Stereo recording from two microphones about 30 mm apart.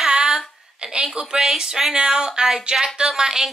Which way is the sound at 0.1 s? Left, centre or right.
Right.